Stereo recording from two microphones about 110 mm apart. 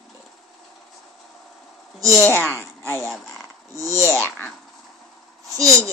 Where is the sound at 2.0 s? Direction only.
30° right (ahead or behind).